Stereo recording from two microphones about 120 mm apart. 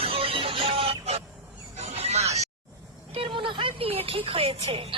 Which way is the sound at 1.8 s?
60° right (ahead or behind).